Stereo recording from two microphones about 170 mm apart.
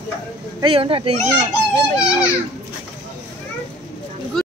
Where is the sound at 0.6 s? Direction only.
30° right (ahead or behind).